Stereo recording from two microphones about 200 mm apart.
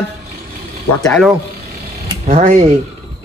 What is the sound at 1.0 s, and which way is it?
Speech, 5° left (ahead or behind).